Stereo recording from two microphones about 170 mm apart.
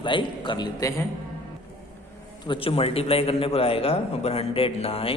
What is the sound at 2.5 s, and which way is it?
A man's voice, 35° left (ahead or behind).